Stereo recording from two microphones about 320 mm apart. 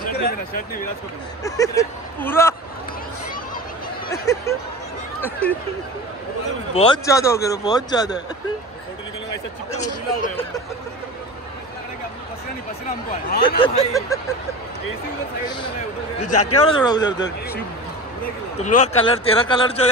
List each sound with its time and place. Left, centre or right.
1.4 s a man's voice: centre
4.1 s a sound: centre
5.2 s speech: centre
6.7 s a man's voice: centre
9.7 s speech: left
13.6 s a man's voice: centre
16.3 s speech: left
16.6 s a man's voice: centre
18.6 s a man's voice: left